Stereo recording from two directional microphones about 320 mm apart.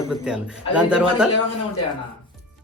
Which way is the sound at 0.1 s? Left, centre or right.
Centre.